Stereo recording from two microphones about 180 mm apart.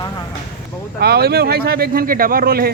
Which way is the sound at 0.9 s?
60° right (ahead or behind).